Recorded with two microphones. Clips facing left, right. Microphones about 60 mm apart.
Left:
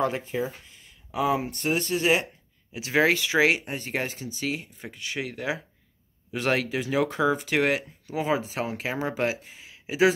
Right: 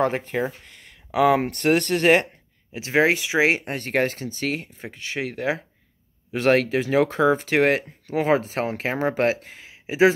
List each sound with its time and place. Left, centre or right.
0.0 s speech: right
2.7 s speech: right
3.6 s speech: right
4.8 s speech: right
9.7 s a sound: right